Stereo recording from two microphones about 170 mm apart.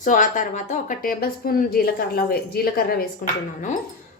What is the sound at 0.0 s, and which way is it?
Speech, 50° left (ahead or behind).